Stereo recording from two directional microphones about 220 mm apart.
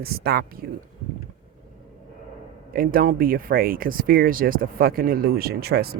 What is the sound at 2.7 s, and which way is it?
Speech, 40° right (ahead or behind).